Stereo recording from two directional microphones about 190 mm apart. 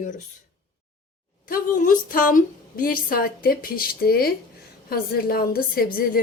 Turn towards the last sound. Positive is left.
turn(degrees=50)  # may be behind; listen again after turning